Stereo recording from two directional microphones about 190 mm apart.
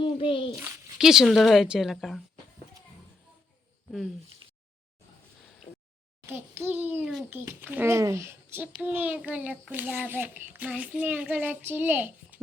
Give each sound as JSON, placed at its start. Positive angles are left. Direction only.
{"t": 0.0, "sound": "a child's voice", "side_deg": 30}
{"t": 0.5, "sound": "a woman's voice", "side_deg": -5}
{"t": 6.2, "sound": "a child's voice", "side_deg": -10}